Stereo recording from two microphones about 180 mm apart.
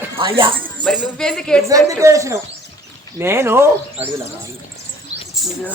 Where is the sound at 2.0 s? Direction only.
15° right (ahead or behind).